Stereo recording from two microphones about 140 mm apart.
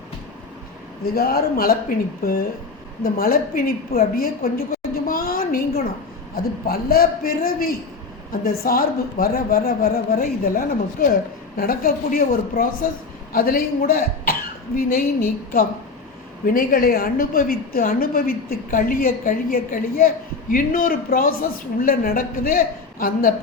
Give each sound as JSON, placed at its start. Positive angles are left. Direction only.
{"t": 1.1, "sound": "a woman's voice", "side_deg": 90}
{"t": 3.0, "sound": "a woman's voice", "side_deg": 90}